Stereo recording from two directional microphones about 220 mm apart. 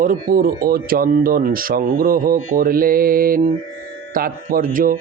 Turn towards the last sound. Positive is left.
turn(degrees=-40)  # may be behind; listen again after turning